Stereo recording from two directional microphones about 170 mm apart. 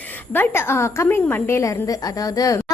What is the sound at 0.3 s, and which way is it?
A woman's voice, 15° left (ahead or behind).